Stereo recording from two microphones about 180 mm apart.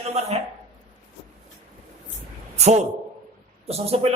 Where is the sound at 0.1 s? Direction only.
35° right (ahead or behind).